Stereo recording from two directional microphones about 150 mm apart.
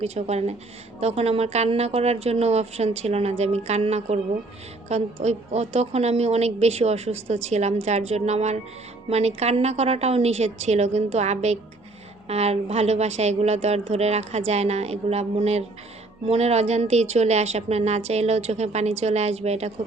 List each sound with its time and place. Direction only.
0.0 s speech: 45° right (ahead or behind)